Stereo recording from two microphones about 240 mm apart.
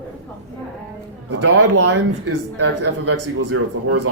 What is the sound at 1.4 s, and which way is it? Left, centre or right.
A man's voice, right.